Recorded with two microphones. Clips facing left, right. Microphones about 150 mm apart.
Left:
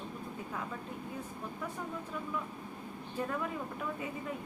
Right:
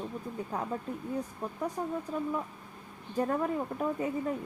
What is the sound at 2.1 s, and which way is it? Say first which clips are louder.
Speech: right 6 dB; 40° right (ahead or behind).